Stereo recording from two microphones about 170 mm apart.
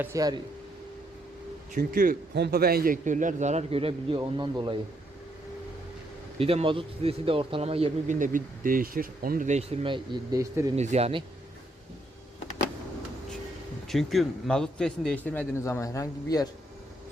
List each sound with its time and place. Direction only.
0.0 s speech: 20° right (ahead or behind)
1.7 s a man's voice: 55° right (ahead or behind); by 4.8 s 25° right (ahead or behind)
6.4 s speech: 35° right (ahead or behind)
10.8 s speech: 40° right (ahead or behind)
13.8 s a man's voice: centre (ahead or behind); by 16.5 s 20° left (ahead or behind)